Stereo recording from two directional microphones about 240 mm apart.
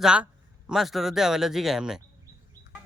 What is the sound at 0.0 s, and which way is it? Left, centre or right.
A man's voice, centre.